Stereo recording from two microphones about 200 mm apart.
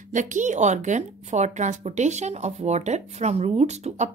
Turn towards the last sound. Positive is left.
turn(degrees=-35)  # may be behind; listen again after turning